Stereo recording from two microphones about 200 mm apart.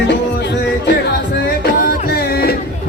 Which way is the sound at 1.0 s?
55° left (ahead or behind).